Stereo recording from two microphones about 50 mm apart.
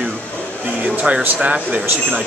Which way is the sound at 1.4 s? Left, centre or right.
Right.